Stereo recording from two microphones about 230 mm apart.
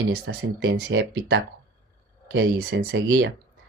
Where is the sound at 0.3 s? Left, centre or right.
Right.